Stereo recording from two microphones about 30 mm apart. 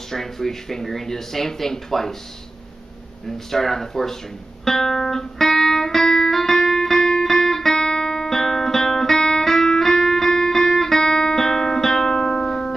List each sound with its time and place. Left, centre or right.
0.1 s speech: centre
3.3 s speech: centre
4.6 s music: centre